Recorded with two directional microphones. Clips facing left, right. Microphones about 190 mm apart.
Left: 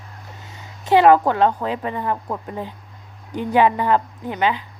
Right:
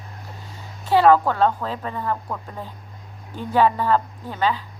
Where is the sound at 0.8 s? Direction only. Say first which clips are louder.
Left 2 dB; 20° left (ahead or behind).